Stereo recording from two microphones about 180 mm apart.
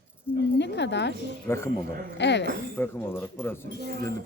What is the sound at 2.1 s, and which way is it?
Speech, 75° left (ahead or behind).